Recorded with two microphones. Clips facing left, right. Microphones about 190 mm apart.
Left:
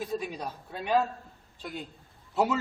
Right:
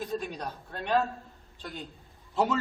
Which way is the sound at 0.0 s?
5° left (ahead or behind).